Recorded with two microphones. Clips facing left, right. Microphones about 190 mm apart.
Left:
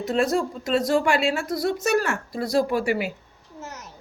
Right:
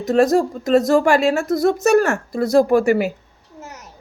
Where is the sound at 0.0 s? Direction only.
45° right (ahead or behind).